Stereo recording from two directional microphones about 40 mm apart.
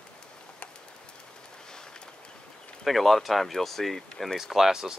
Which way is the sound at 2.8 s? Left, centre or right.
Centre.